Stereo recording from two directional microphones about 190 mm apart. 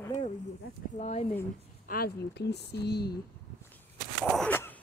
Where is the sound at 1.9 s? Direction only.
55° left (ahead or behind).